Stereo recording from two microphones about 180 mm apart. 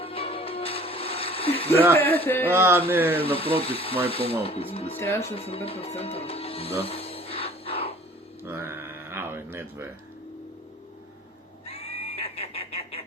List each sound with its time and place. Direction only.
0.0 s music: 30° left (ahead or behind)
2.0 s speech: 10° left (ahead or behind)
2.5 s speech: 15° right (ahead or behind)
3.2 s speech: 30° left (ahead or behind)
4.9 s speech: 15° left (ahead or behind)
5.3 s music: 35° left (ahead or behind)
8.4 s a sound: 15° right (ahead or behind)
11.6 s neigh: 30° left (ahead or behind)